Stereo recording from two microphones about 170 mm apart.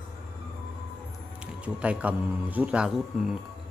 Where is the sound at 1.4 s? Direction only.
5° right (ahead or behind).